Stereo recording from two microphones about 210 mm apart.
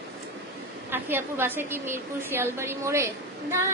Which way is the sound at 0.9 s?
10° right (ahead or behind).